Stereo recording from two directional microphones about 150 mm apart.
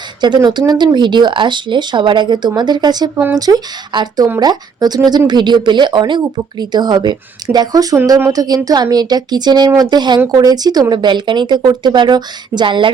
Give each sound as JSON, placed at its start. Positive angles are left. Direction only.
{"t": 0.2, "sound": "speech", "side_deg": -30}